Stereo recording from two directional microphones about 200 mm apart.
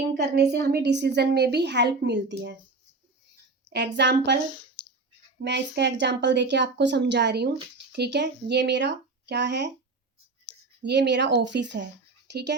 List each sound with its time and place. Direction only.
0.1 s a woman's voice: 55° right (ahead or behind)
3.9 s a woman's voice: 60° right (ahead or behind)
4.4 s clicking: 25° left (ahead or behind)
5.4 s a woman's voice: 55° right (ahead or behind)
10.5 s a sound: 5° left (ahead or behind)
10.8 s a woman's voice: 60° right (ahead or behind)